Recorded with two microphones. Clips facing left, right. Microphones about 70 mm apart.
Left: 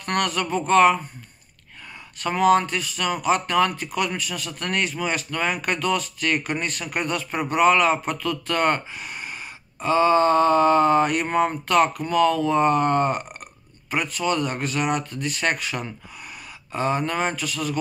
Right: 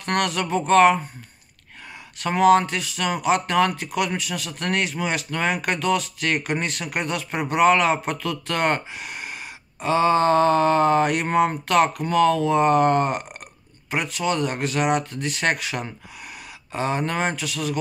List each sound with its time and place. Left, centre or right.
0.0 s speech: right
2.2 s speech: right
9.8 s speech: right
14.2 s speech: right
16.7 s speech: right